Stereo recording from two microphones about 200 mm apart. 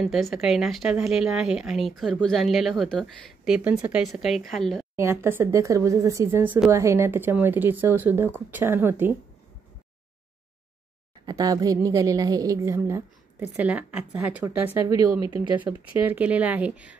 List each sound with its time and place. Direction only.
0.0 s a woman's voice: centre (ahead or behind)
4.9 s a woman's voice: 15° right (ahead or behind)
11.2 s a woman's voice: 15° right (ahead or behind)
15.2 s speech: 25° left (ahead or behind)
15.5 s a woman's voice: 10° right (ahead or behind)